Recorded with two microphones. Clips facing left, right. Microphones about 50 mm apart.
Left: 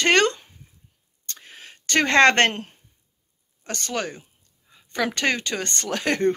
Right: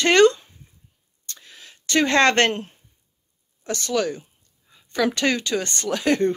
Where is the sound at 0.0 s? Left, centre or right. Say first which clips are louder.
Right 4 dB; left.